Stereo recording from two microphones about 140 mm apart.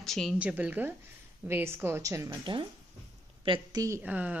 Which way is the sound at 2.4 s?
35° right (ahead or behind).